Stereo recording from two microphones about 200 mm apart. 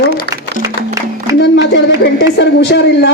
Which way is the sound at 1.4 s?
60° left (ahead or behind).